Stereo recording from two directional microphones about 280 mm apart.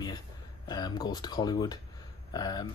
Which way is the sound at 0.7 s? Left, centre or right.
Centre.